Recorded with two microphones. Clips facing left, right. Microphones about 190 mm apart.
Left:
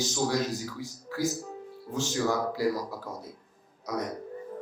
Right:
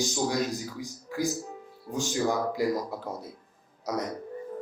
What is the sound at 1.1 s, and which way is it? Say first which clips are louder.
Music: right 2 dB; 15° right (ahead or behind).